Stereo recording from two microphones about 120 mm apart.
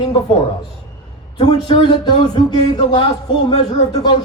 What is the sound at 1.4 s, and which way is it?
A man's voice, 40° left (ahead or behind).